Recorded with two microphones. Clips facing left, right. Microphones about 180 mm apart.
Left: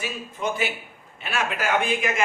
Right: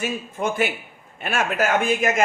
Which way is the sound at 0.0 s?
50° right (ahead or behind).